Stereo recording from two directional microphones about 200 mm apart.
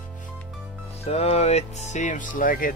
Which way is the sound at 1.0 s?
30° left (ahead or behind).